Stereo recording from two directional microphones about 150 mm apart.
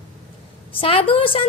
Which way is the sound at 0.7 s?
35° left (ahead or behind).